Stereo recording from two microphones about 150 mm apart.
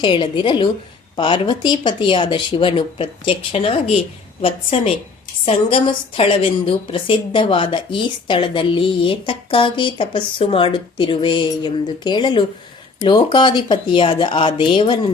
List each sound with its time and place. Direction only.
0.0 s a woman's voice: 35° left (ahead or behind)